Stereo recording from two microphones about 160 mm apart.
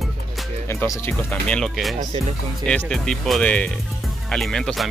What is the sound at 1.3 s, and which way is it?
Speech, 5° left (ahead or behind).